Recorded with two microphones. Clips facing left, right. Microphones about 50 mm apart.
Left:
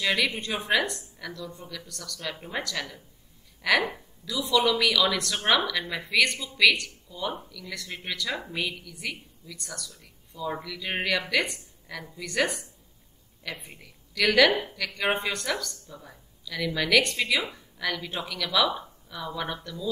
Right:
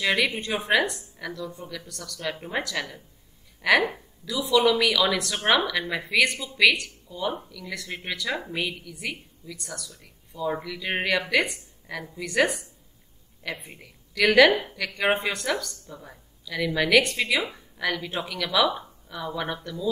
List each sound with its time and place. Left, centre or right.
0.0 s speech: centre
13.7 s speech: centre
15.3 s speech: centre